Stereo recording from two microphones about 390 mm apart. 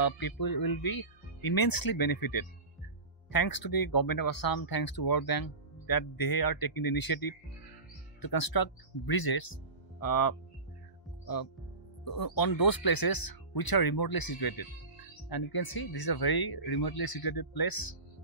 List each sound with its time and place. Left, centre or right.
0.0 s speech: left
12.0 s speech: left